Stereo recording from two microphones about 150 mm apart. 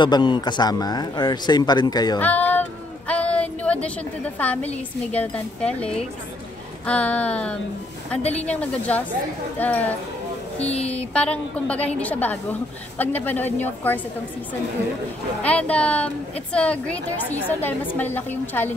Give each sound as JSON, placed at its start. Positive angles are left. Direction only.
{"t": 0.0, "sound": "a man's voice", "side_deg": 30}
{"t": 2.1, "sound": "speech", "side_deg": 10}
{"t": 3.1, "sound": "a sound", "side_deg": 10}
{"t": 5.1, "sound": "a woman's voice", "side_deg": 10}
{"t": 8.2, "sound": "a woman's voice", "side_deg": 45}
{"t": 8.5, "sound": "a woman's voice", "side_deg": 10}
{"t": 15.4, "sound": "a woman's voice", "side_deg": 10}